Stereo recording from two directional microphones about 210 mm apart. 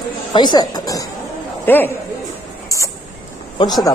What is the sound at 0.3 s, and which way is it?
A woman's voice, 20° left (ahead or behind).